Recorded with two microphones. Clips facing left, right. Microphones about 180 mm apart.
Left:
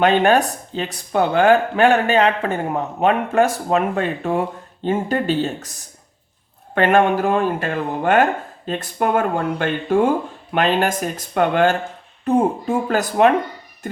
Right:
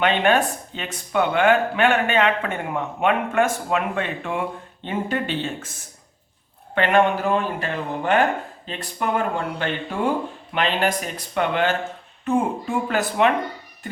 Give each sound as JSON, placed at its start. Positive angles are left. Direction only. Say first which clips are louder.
{"t": 0.0, "sound": "speech", "louder": "left 4 dB", "side_deg": 45}
{"t": 6.7, "sound": "speech", "louder": "left 3 dB", "side_deg": 45}